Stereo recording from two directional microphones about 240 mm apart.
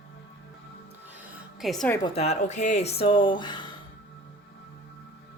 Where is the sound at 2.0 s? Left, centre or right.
Left.